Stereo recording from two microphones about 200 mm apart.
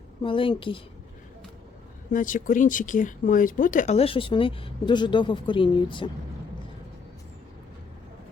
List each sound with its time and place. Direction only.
0.2 s a woman's voice: 25° left (ahead or behind)
2.0 s speech: 40° left (ahead or behind); by 6.1 s 25° left (ahead or behind)